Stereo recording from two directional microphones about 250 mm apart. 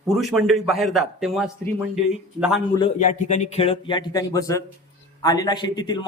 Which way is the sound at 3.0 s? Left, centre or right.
Left.